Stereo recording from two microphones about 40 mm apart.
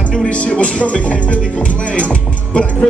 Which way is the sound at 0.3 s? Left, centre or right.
Left.